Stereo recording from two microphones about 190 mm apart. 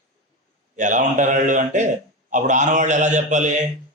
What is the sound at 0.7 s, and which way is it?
A man's voice, 40° right (ahead or behind).